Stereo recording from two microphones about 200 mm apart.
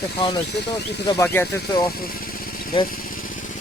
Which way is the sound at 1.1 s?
10° left (ahead or behind).